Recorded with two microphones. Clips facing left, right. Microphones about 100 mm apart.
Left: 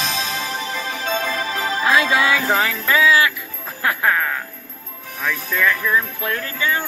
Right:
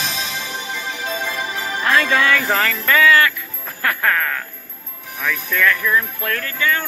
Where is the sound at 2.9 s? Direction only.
20° left (ahead or behind).